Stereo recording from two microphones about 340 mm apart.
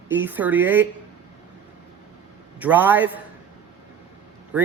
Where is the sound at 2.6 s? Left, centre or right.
Centre.